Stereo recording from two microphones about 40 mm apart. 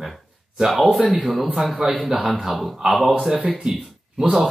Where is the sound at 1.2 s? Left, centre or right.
Centre.